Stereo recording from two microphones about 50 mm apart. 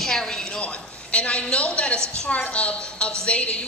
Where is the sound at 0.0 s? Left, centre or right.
Centre.